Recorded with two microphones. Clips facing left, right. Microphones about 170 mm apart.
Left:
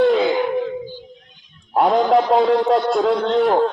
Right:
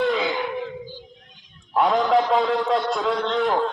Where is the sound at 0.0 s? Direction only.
45° left (ahead or behind).